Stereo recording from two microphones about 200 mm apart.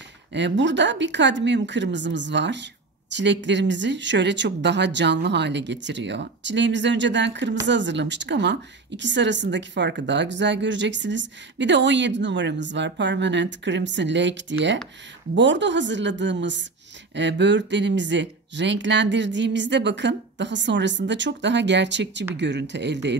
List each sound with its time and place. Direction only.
0.3 s a woman's voice: 60° right (ahead or behind)